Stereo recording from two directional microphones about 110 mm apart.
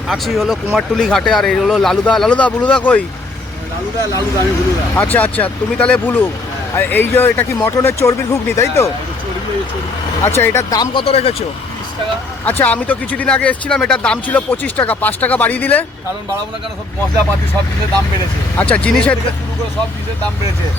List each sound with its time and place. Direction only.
0.1 s speech: centre (ahead or behind)
4.9 s speech: 15° left (ahead or behind)
10.2 s speech: 25° left (ahead or behind)
10.8 s speech: 55° left (ahead or behind)
12.5 s speech: 15° left (ahead or behind)
18.5 s speech: 10° left (ahead or behind)